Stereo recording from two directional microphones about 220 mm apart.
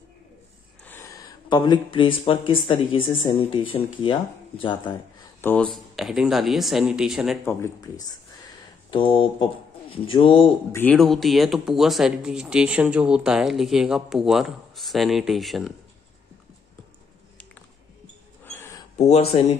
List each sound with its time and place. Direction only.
0.8 s speech: 10° left (ahead or behind)
5.4 s speech: 5° left (ahead or behind)
7.4 s speech: 15° left (ahead or behind)
10.7 s speech: 5° left (ahead or behind)
18.4 s a sound: 10° left (ahead or behind)
18.9 s speech: 30° left (ahead or behind)